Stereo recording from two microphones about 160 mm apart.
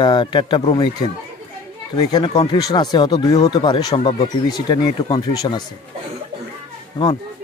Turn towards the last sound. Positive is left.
turn(degrees=25)  # may be behind; listen again after turning